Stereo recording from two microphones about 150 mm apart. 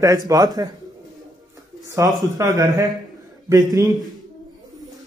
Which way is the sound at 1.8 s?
20° right (ahead or behind).